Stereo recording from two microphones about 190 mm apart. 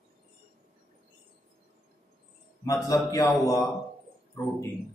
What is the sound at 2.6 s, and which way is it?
Speech, 15° left (ahead or behind).